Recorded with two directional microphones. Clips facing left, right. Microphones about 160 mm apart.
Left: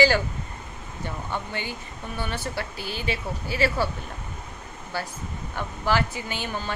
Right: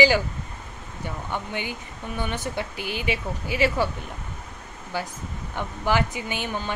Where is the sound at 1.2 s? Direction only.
15° right (ahead or behind).